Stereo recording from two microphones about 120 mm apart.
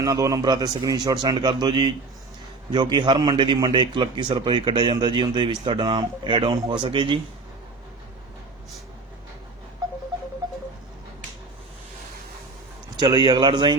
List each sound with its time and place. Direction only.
0.0 s a man's voice: 30° right (ahead or behind); by 7.2 s 45° right (ahead or behind)
13.0 s a man's voice: 40° right (ahead or behind)